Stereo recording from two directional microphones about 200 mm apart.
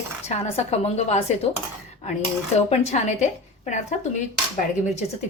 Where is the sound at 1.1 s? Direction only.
30° left (ahead or behind).